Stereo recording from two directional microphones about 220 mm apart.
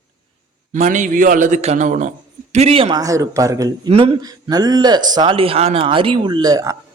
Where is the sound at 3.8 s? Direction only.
25° right (ahead or behind).